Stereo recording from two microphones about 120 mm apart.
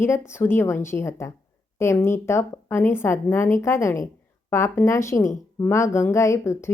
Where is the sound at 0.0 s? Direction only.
20° left (ahead or behind).